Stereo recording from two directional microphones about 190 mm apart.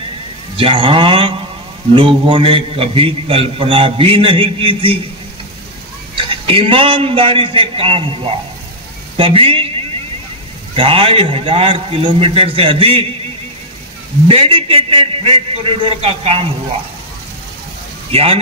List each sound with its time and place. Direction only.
0.6 s a man's voice: 30° right (ahead or behind)
6.1 s a man's voice: 30° right (ahead or behind)
10.8 s a man's voice: 30° right (ahead or behind)
14.2 s a man's voice: 30° right (ahead or behind)
18.1 s speech: 30° right (ahead or behind)